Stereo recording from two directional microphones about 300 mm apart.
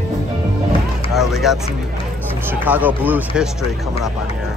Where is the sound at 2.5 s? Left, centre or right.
Centre.